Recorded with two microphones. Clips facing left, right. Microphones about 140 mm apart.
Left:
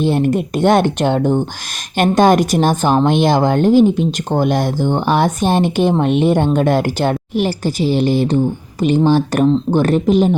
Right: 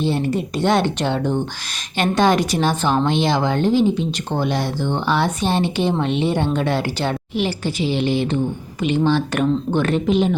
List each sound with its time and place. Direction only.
0.0 s a woman's voice: 50° left (ahead or behind)